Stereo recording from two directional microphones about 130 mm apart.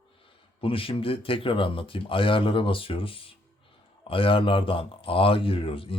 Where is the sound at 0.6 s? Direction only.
45° left (ahead or behind).